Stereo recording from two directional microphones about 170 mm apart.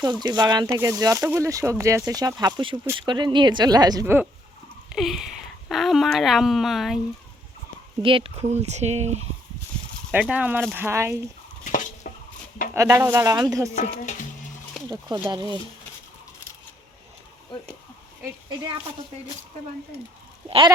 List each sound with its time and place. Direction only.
0.0 s speech: 25° right (ahead or behind)
4.9 s speech: centre (ahead or behind)
8.0 s speech: 30° right (ahead or behind)
10.1 s speech: 10° right (ahead or behind)
11.6 s a sound: 50° left (ahead or behind)
12.7 s speech: 15° right (ahead or behind)
13.7 s speech: 45° left (ahead or behind)
14.8 s speech: 20° right (ahead or behind)
20.5 s speech: 30° right (ahead or behind)